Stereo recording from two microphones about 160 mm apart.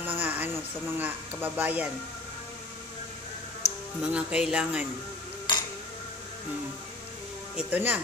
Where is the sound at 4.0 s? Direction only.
5° right (ahead or behind).